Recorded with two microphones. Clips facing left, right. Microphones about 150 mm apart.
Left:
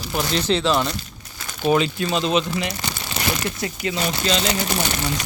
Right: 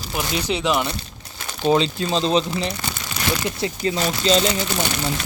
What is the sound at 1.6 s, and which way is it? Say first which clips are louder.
Speech: right 1 dB; 25° right (ahead or behind).